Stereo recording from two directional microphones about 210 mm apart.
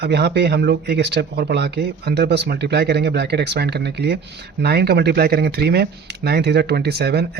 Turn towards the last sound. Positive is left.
turn(degrees=-50)  # may be behind; listen again after turning